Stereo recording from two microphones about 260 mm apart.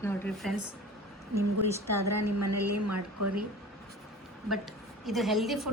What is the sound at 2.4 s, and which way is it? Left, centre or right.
Speech, right.